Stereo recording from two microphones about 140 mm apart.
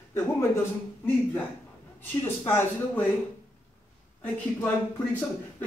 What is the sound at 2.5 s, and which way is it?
Speech, 15° left (ahead or behind).